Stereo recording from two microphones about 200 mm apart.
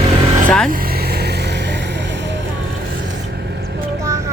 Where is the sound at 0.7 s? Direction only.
50° right (ahead or behind).